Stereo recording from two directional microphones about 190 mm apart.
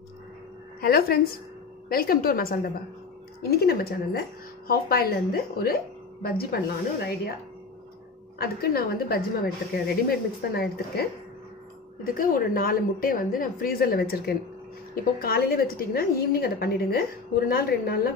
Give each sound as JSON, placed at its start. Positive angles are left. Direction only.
{"t": 0.7, "sound": "a woman's voice", "side_deg": 55}
{"t": 8.4, "sound": "a woman's voice", "side_deg": 55}